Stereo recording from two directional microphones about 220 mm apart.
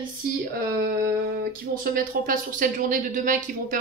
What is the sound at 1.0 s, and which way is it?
Speech, 40° right (ahead or behind).